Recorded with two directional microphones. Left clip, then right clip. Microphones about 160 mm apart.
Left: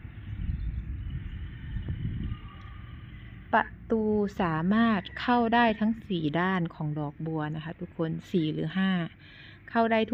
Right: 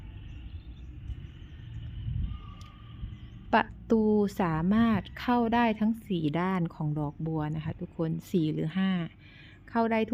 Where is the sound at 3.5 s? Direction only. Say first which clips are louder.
Even; 40° right (ahead or behind).